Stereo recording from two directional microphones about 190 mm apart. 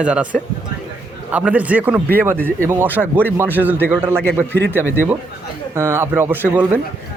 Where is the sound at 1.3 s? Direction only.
5° right (ahead or behind).